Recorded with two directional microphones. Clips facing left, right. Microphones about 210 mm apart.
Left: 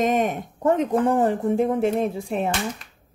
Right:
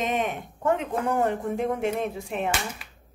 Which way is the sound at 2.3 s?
5° right (ahead or behind).